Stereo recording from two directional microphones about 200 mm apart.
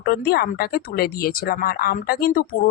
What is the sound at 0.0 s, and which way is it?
Speech, 50° left (ahead or behind).